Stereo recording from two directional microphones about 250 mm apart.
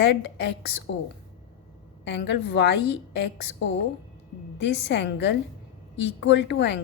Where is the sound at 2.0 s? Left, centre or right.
Left.